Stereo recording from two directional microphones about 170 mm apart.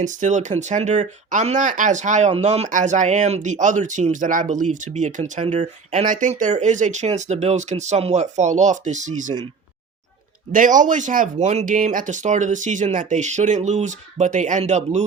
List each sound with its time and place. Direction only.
0.0 s speech: 45° right (ahead or behind)
10.5 s speech: 50° right (ahead or behind)